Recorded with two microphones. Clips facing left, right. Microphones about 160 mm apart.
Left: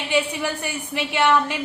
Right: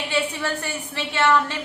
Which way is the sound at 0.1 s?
15° left (ahead or behind).